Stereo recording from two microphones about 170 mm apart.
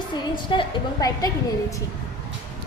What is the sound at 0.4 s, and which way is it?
Speech, 25° left (ahead or behind).